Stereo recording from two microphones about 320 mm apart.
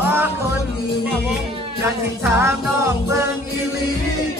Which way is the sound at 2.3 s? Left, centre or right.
Centre.